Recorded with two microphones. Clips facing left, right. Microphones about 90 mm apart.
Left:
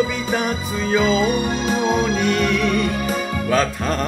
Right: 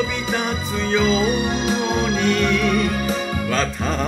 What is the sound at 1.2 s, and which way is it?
Music, 50° left (ahead or behind).